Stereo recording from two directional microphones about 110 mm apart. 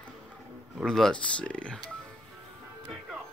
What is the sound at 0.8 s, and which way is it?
Speech, 5° left (ahead or behind).